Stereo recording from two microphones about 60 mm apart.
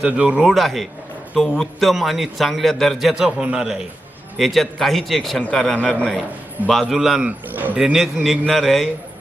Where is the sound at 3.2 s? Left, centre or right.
Centre.